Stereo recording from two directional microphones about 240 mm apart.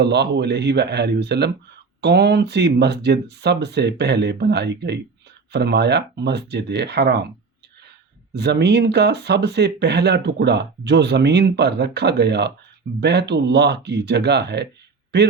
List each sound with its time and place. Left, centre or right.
0.0 s speech: right
8.4 s speech: right